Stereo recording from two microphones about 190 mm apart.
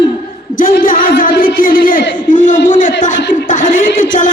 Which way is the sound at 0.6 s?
45° left (ahead or behind).